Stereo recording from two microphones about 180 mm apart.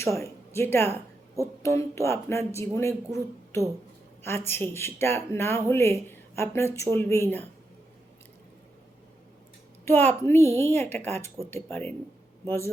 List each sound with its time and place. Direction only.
0.0 s speech: 15° left (ahead or behind)
9.8 s a woman's voice: 10° left (ahead or behind)